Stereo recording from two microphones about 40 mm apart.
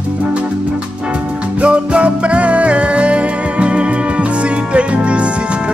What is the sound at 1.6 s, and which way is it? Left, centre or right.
Music, right.